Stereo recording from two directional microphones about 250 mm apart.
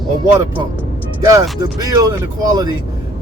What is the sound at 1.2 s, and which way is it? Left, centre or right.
Speech, centre.